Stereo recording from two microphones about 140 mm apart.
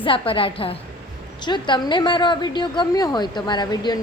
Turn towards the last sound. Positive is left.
turn(degrees=30)  # may be behind; listen again after turning